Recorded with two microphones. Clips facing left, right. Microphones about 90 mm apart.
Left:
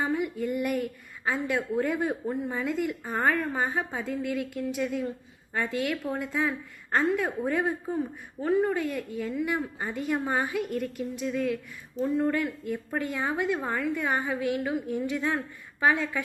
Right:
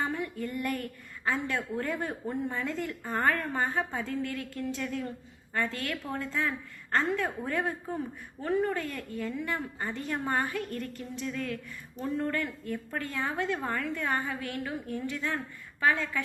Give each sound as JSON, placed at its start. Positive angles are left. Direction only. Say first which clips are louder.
{"t": 0.0, "sound": "a woman's voice", "louder": "left 4 dB", "side_deg": 15}